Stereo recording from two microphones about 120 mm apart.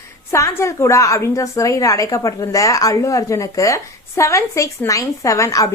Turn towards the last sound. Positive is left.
turn(degrees=25)  # may be behind; listen again after turning